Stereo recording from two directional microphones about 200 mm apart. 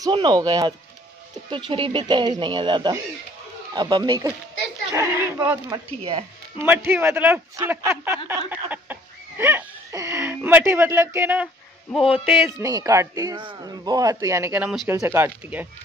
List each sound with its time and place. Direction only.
0.0 s a man's voice: 20° right (ahead or behind)
12.1 s a sound: centre (ahead or behind)
12.4 s a man's voice: 15° right (ahead or behind)